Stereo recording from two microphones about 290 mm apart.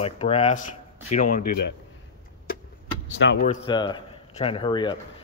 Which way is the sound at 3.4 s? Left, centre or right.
Centre.